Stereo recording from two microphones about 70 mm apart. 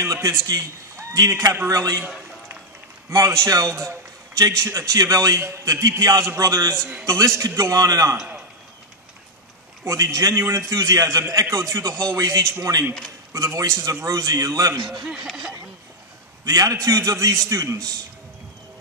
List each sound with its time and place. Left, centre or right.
0.0 s a man's voice: right
3.1 s a man's voice: right
9.8 s a man's voice: right
16.4 s a man's voice: right